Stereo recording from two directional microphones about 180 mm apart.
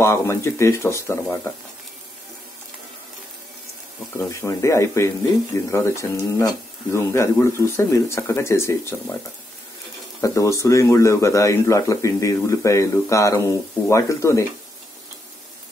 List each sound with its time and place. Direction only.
0.0 s speech: 15° left (ahead or behind)
4.2 s speech: 15° left (ahead or behind)
10.2 s speech: 15° left (ahead or behind)